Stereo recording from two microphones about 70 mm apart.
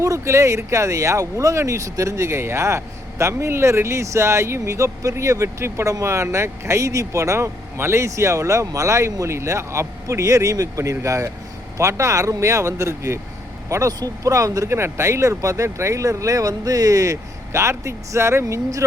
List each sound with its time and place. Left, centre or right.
0.0 s speech: right
14.8 s speech: right